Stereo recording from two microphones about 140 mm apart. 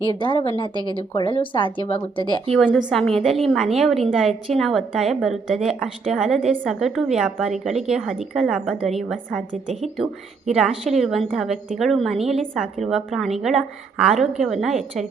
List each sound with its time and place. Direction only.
0.2 s speech: 35° left (ahead or behind)
2.5 s a woman's voice: centre (ahead or behind)
10.5 s a woman's voice: centre (ahead or behind)